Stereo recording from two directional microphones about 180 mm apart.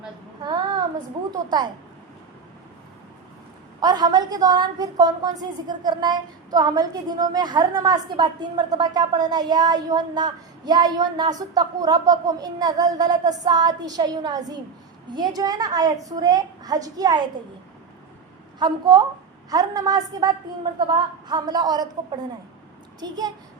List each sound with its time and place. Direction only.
0.4 s child singing: 25° right (ahead or behind)
1.3 s a woman's voice: 20° right (ahead or behind)
3.8 s a woman's voice: 20° right (ahead or behind)
18.6 s a woman's voice: 25° right (ahead or behind)